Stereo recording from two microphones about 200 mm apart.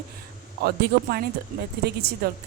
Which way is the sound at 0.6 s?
50° right (ahead or behind).